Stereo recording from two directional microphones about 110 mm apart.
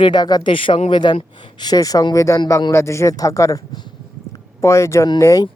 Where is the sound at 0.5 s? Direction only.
55° left (ahead or behind); by 3.8 s 35° left (ahead or behind).